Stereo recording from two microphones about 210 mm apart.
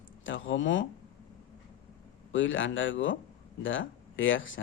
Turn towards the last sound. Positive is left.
turn(degrees=65)  # may be behind; listen again after turning